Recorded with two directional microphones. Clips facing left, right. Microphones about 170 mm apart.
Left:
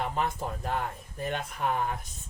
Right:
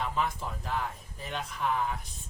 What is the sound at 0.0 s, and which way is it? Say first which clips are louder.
Speech: left 1 dB; 50° left (ahead or behind).